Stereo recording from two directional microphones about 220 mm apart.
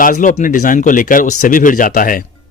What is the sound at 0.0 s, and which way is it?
Speech, 35° left (ahead or behind).